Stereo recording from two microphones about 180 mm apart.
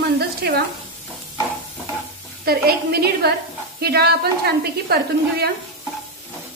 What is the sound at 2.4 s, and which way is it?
A woman's voice, 60° right (ahead or behind).